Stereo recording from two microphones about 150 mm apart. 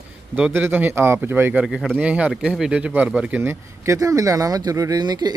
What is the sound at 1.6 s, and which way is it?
Speech, centre (ahead or behind).